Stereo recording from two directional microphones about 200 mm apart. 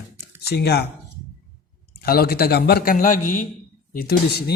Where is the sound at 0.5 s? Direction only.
55° left (ahead or behind).